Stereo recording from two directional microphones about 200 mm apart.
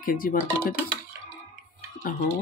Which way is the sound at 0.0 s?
45° left (ahead or behind).